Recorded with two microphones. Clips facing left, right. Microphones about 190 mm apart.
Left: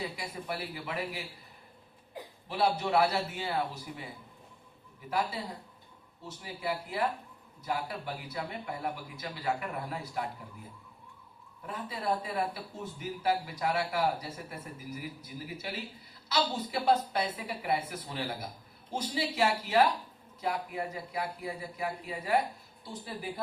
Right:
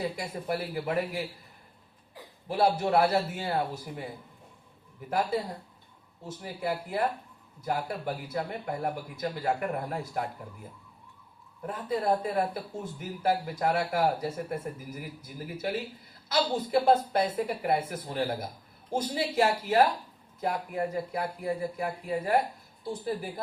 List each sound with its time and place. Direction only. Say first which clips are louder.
0.2 s a man's voice: right 5 dB; 45° right (ahead or behind)
2.5 s a man's voice: right 4 dB; 50° right (ahead or behind)
6.2 s a man's voice: right 3 dB; 50° right (ahead or behind)